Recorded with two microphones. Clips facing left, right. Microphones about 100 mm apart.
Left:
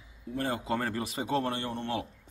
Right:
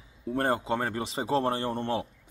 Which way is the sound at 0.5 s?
25° right (ahead or behind).